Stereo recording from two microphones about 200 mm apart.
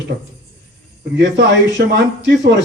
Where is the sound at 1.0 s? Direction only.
60° right (ahead or behind).